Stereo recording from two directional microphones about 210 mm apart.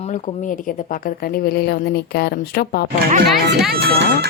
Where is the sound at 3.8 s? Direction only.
50° right (ahead or behind).